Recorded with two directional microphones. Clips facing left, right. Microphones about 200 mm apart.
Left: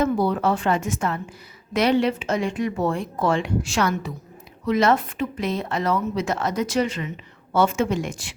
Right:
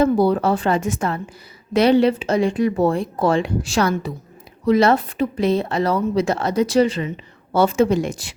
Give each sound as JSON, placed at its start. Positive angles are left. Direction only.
{"t": 0.0, "sound": "a woman's voice", "side_deg": -35}